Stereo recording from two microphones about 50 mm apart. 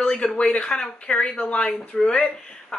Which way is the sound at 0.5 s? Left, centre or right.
Left.